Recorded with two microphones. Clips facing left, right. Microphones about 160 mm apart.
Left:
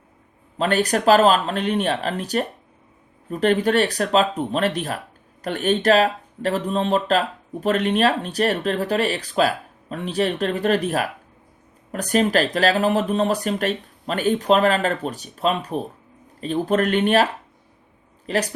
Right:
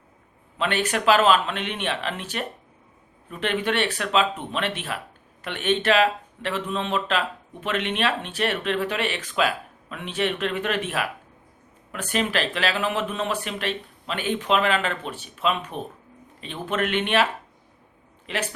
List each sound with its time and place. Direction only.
0.5 s speech: 40° left (ahead or behind)
18.3 s speech: 40° left (ahead or behind)